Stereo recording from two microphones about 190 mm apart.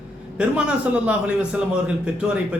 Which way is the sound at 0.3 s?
5° right (ahead or behind).